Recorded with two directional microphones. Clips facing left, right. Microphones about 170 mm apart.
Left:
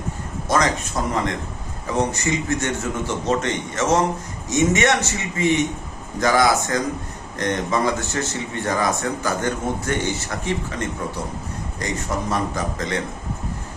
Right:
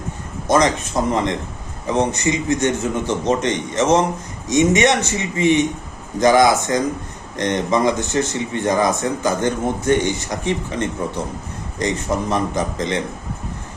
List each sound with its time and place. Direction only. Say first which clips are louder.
0.4 s a man's voice: right 4 dB; 20° right (ahead or behind)